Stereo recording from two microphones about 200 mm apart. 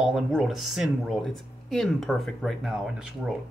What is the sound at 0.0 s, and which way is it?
Speech, centre (ahead or behind).